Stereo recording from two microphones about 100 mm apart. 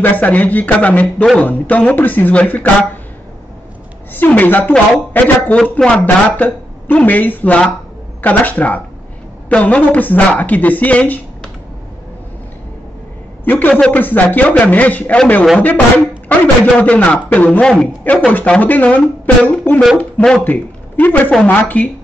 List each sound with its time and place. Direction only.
0.0 s speech: 15° left (ahead or behind)
4.1 s speech: 15° left (ahead or behind)
13.5 s speech: 20° left (ahead or behind)